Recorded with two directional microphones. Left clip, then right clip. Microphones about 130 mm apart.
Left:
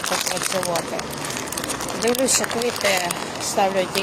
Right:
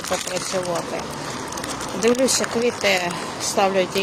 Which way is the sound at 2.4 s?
55° right (ahead or behind).